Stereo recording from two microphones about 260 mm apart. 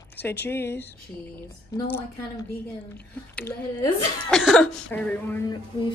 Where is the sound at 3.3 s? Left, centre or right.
Centre.